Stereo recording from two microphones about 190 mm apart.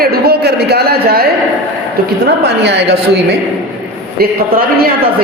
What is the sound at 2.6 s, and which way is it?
Speech, 65° right (ahead or behind).